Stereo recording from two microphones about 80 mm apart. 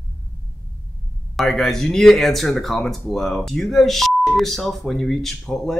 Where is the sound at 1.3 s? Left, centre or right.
Centre.